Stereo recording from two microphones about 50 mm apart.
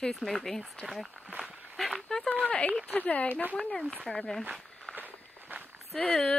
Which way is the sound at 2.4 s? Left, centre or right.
Left.